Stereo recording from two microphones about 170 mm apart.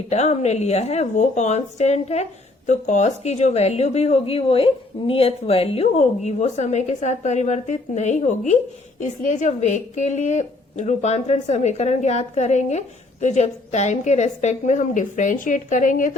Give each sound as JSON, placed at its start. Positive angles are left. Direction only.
{"t": 0.1, "sound": "a woman's voice", "side_deg": 40}